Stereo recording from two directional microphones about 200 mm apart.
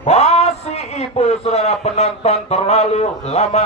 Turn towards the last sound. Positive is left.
turn(degrees=30)  # may be behind; listen again after turning